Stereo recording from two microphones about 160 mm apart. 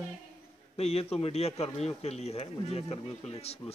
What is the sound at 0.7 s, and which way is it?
A man's voice, 40° left (ahead or behind).